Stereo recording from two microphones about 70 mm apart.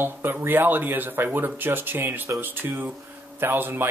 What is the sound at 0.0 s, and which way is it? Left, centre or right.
Speech, right.